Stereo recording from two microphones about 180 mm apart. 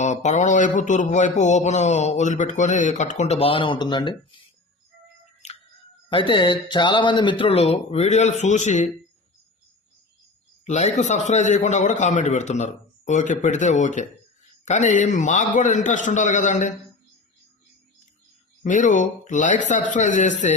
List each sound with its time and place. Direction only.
0.0 s speech: 40° left (ahead or behind)
5.4 s a sound: 40° left (ahead or behind)
6.1 s speech: 25° left (ahead or behind)
10.7 s a man's voice: 40° left (ahead or behind)
18.6 s a man's voice: 45° left (ahead or behind)